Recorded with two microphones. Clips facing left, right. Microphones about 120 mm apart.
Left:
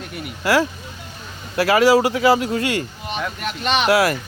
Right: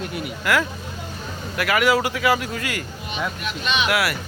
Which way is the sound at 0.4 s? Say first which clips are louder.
Left 4 dB; 30° left (ahead or behind).